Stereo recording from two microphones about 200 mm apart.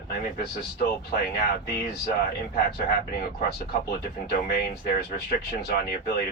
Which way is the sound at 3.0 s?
50° left (ahead or behind).